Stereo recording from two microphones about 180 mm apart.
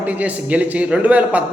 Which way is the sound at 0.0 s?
10° right (ahead or behind).